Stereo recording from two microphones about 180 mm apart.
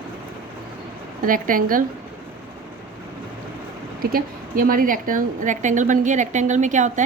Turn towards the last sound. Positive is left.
turn(degrees=-45)  # may be behind; listen again after turning